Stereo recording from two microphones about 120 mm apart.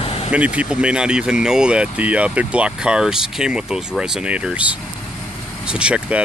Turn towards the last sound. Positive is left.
turn(degrees=-10)  # may be behind; listen again after turning